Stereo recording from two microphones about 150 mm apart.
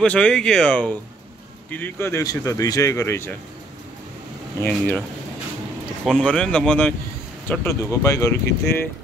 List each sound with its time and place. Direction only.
0.0 s speech: 10° left (ahead or behind)
4.6 s speech: 10° left (ahead or behind)
6.0 s speech: 5° left (ahead or behind)
7.6 s speech: 20° left (ahead or behind)